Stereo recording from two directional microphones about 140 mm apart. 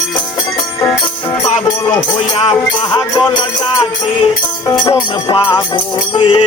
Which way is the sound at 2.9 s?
30° left (ahead or behind).